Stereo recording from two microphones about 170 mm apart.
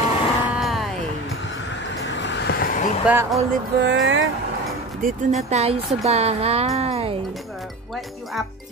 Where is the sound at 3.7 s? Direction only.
90° right.